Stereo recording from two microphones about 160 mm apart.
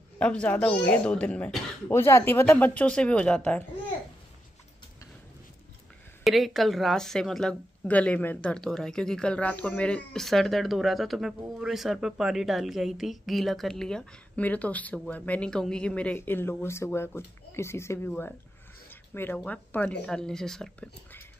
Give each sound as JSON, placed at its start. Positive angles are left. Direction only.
{"t": 0.2, "sound": "speech", "side_deg": 5}
{"t": 6.2, "sound": "a woman's voice", "side_deg": 0}